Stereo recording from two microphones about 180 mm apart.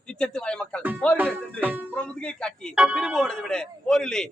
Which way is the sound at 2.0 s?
5° left (ahead or behind).